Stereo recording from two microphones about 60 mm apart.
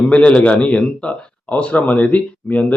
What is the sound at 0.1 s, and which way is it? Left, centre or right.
A man's voice, centre.